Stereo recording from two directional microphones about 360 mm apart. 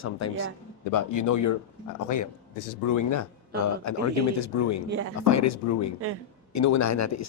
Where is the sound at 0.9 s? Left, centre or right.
Left.